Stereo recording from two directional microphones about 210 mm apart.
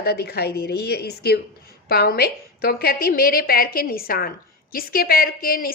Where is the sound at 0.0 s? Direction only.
50° left (ahead or behind).